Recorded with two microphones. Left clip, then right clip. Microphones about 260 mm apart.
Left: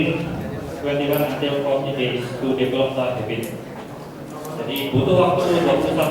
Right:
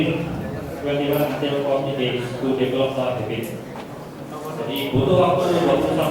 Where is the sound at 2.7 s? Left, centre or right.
Left.